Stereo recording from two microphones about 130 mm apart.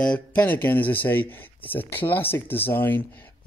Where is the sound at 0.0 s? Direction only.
10° left (ahead or behind).